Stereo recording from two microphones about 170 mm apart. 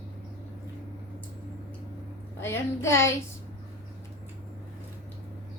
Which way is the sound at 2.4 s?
15° left (ahead or behind).